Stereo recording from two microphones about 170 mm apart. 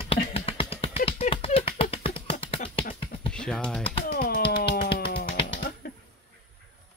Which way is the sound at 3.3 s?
5° left (ahead or behind).